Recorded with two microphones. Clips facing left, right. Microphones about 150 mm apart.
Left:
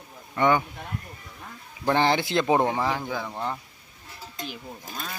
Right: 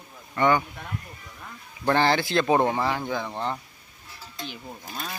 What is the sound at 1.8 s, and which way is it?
A man's voice, 15° left (ahead or behind).